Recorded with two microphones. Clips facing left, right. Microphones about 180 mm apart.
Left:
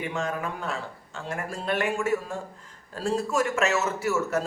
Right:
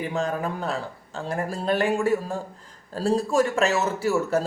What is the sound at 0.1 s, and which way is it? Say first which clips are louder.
Speech: right 4 dB; 35° right (ahead or behind).